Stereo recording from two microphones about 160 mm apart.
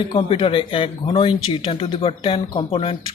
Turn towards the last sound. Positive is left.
turn(degrees=30)  # may be behind; listen again after turning